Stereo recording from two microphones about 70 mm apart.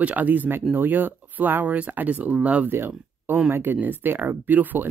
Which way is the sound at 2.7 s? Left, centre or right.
Right.